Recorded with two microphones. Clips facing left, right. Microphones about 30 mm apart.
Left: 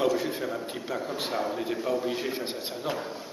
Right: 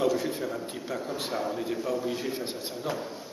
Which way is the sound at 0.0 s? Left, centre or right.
Centre.